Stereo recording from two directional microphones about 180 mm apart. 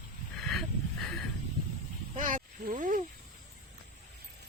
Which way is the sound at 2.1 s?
45° right (ahead or behind).